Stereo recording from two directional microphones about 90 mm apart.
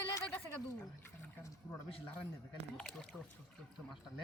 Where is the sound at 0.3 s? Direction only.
20° left (ahead or behind).